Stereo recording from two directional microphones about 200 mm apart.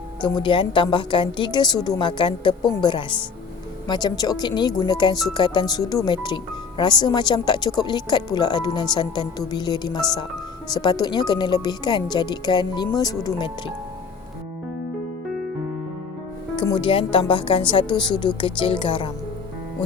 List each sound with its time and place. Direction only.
0.2 s speech: 25° left (ahead or behind)
16.6 s speech: 25° left (ahead or behind)